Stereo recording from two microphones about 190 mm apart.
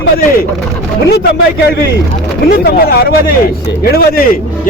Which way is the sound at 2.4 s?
55° left (ahead or behind).